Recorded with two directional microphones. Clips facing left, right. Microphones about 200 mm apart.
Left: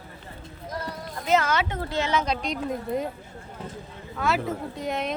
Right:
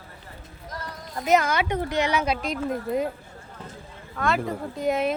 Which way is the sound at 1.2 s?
15° right (ahead or behind).